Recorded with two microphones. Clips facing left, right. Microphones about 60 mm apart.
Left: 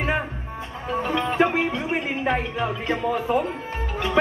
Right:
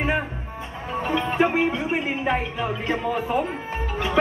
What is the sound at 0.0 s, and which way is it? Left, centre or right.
Music, centre.